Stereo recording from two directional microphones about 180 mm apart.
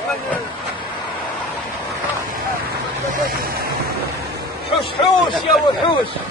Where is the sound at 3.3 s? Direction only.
55° right (ahead or behind).